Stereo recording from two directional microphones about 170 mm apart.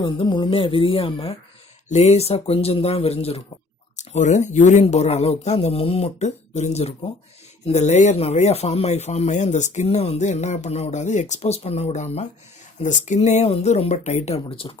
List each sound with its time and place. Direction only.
0.0 s speech: 25° left (ahead or behind)